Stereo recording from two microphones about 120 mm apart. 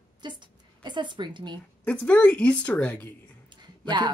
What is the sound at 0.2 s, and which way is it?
A woman's voice, 40° right (ahead or behind).